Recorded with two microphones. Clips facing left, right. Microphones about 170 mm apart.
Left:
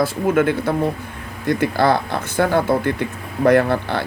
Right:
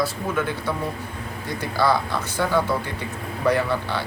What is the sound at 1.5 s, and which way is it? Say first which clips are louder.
Speech: left 5 dB; 55° left (ahead or behind).